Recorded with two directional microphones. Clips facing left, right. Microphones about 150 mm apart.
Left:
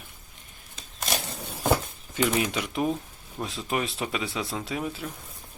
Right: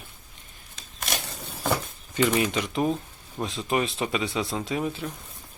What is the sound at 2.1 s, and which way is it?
Speech, 5° left (ahead or behind).